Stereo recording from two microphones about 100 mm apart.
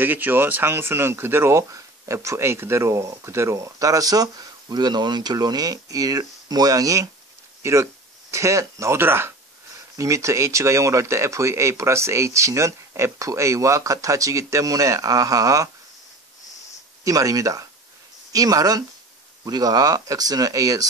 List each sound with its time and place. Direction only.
0.0 s speech: 20° right (ahead or behind); by 15.7 s 35° right (ahead or behind)
17.0 s speech: 35° right (ahead or behind)